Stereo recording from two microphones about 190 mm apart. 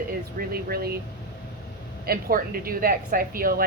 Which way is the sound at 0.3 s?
55° right (ahead or behind).